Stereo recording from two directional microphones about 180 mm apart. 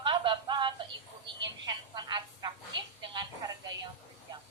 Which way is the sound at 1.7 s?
25° right (ahead or behind).